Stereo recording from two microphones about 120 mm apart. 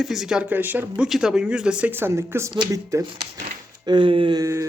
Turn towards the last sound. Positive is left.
turn(degrees=-25)  # may be behind; listen again after turning